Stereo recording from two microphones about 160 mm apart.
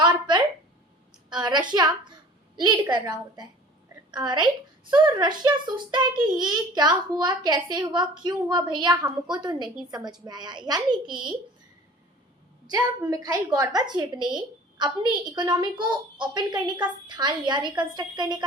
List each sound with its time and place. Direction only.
0.0 s a sound: 30° right (ahead or behind)
1.3 s a woman's voice: 25° right (ahead or behind)
6.1 s a child's voice: 5° right (ahead or behind)
6.4 s a woman's voice: 25° right (ahead or behind)
12.6 s a woman's voice: 20° right (ahead or behind)